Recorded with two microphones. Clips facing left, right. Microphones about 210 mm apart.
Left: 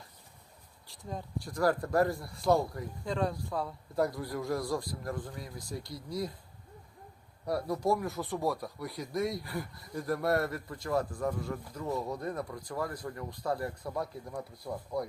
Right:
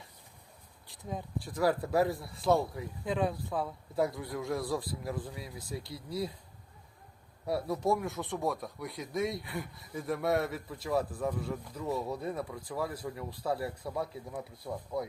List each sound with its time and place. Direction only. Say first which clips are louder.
0.9 s speech: right 1 dB; centre (ahead or behind)
7.4 s speech: even; centre (ahead or behind)